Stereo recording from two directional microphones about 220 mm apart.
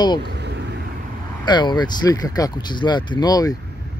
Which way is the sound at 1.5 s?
20° left (ahead or behind).